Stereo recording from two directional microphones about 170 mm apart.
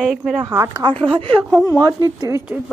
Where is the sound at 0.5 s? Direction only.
20° right (ahead or behind).